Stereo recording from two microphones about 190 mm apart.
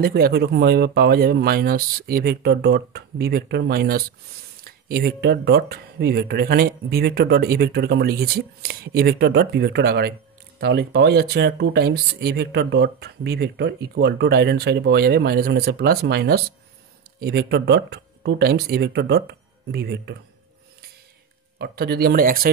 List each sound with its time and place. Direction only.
0.0 s speech: 55° right (ahead or behind)
21.5 s speech: 55° right (ahead or behind)